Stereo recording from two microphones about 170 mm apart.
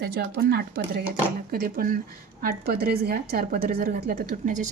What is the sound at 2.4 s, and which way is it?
A woman's voice, 65° right (ahead or behind).